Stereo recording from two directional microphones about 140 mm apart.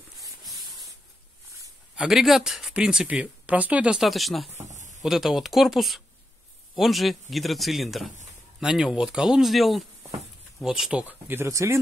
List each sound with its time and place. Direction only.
2.0 s speech: 5° right (ahead or behind)
4.6 s a sound: 60° right (ahead or behind)
5.0 s speech: 5° right (ahead or behind); by 11.8 s 20° right (ahead or behind)